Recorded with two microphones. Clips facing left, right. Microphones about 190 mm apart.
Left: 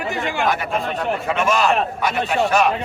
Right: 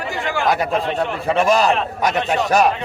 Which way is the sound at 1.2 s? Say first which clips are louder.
Right 4 dB; 35° right (ahead or behind).